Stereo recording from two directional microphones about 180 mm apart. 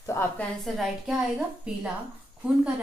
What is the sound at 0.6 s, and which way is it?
A woman's voice, centre (ahead or behind).